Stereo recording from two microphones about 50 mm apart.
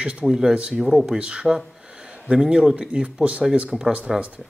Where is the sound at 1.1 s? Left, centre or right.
Right.